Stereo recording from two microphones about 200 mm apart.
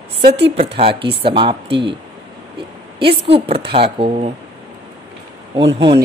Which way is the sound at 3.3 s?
30° right (ahead or behind).